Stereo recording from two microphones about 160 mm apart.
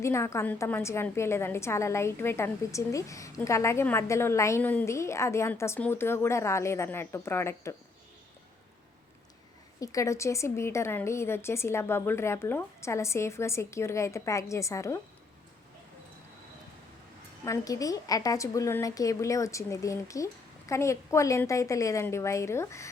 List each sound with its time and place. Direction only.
0.0 s a woman's voice: 15° left (ahead or behind)
9.8 s a woman's voice: 20° left (ahead or behind)
17.4 s a woman's voice: 20° left (ahead or behind)